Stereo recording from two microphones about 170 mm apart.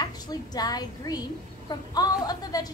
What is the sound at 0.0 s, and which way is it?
A woman's voice, 25° left (ahead or behind).